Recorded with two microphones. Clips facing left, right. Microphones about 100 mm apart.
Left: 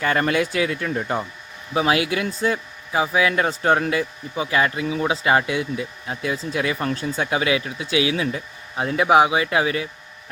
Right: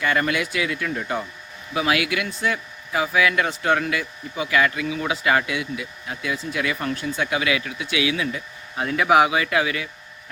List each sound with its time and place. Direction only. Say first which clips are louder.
0.0 s speech: left 2 dB; 35° left (ahead or behind)